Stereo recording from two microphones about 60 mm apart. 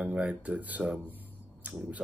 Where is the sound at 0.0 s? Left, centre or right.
Right.